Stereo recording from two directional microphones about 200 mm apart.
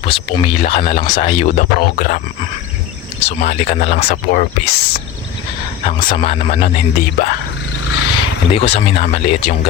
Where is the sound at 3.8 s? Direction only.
50° left (ahead or behind).